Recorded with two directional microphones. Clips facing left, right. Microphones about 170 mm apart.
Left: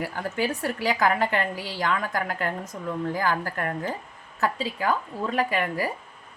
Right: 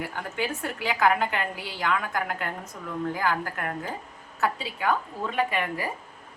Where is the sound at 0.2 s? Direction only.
35° left (ahead or behind).